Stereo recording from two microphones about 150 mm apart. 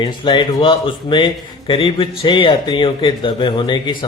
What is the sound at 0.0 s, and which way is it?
Speech, 30° left (ahead or behind).